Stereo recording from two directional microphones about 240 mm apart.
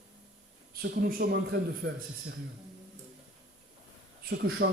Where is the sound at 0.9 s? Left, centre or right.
Right.